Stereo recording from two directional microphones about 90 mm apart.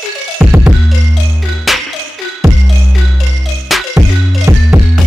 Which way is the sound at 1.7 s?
Centre (ahead or behind).